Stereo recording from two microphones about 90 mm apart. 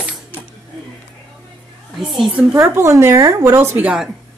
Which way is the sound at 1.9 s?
Centre (ahead or behind).